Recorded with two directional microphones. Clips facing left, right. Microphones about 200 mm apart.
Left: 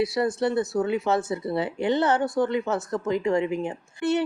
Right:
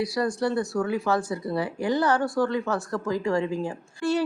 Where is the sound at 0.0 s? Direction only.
25° left (ahead or behind).